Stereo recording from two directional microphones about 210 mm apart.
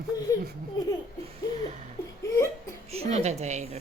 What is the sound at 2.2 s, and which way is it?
Laughter, 15° left (ahead or behind).